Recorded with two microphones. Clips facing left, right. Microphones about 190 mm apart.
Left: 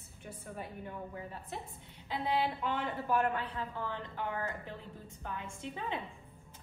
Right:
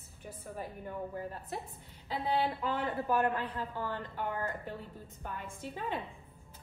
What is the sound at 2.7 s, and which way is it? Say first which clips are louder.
A woman's voice: right 2 dB; centre (ahead or behind).